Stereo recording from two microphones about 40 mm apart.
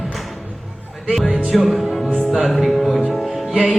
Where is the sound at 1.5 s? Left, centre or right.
Centre.